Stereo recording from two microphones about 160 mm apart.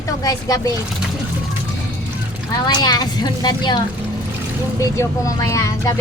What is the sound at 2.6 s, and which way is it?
Speech, 25° left (ahead or behind).